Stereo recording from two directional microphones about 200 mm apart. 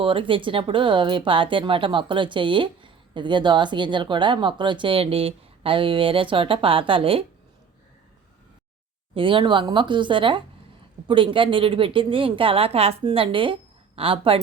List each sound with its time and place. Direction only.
0.0 s speech: 25° right (ahead or behind)
9.1 s speech: 25° right (ahead or behind)